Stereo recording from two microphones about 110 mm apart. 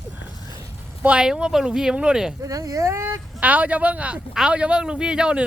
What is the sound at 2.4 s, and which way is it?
Speech, 30° right (ahead or behind).